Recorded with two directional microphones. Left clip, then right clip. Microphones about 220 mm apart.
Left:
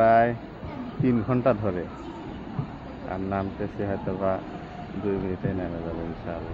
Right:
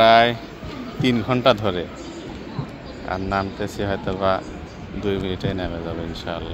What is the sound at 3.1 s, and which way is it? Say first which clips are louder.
Speech: right 6 dB; 10° right (ahead or behind).